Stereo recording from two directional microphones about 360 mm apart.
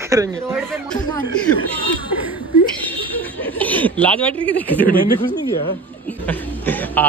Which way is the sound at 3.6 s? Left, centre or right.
Centre.